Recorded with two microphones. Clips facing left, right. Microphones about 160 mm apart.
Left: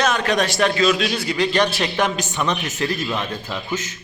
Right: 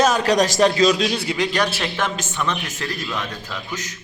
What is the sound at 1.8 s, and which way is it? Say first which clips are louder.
A man's voice: left 3 dB; 15° left (ahead or behind).